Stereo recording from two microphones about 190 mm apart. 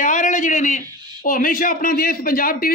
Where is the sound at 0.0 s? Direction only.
40° left (ahead or behind).